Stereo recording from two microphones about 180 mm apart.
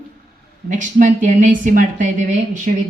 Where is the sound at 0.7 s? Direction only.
45° right (ahead or behind).